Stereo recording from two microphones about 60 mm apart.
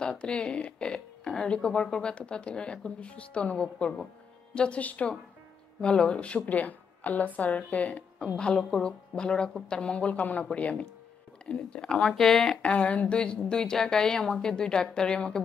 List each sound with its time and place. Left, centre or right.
0.0 s a woman's voice: centre
12.6 s speech: left